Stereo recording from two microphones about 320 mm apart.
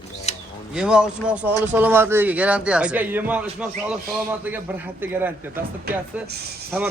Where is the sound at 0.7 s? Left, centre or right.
Centre.